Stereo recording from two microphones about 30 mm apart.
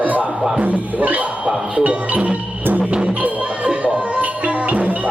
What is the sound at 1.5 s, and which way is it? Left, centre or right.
Music, right.